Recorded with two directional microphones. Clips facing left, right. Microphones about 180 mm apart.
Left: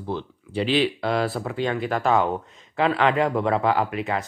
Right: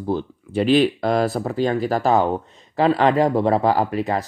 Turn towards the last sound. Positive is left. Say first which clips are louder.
# right 3 dB
turn(degrees=-35)  # may be behind; listen again after turning